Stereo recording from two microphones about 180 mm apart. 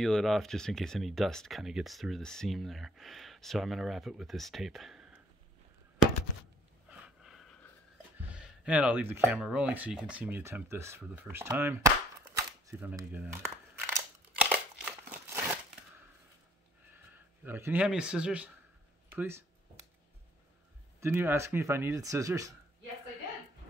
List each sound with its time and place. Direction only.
0.0 s speech: centre (ahead or behind)
6.9 s a sound: 5° right (ahead or behind)
9.2 s speech: 5° right (ahead or behind)
12.6 s crumpling: 15° right (ahead or behind)
17.1 s speech: 10° right (ahead or behind)
21.0 s speech: 15° right (ahead or behind)